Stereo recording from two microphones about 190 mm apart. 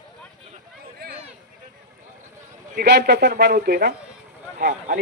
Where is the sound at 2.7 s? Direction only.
60° right (ahead or behind).